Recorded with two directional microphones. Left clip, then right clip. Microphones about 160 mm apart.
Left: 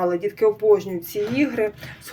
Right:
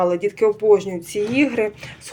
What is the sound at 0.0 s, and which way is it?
Speech, 20° right (ahead or behind).